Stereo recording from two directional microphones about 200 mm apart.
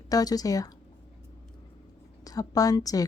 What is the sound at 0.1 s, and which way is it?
Speech, 20° left (ahead or behind).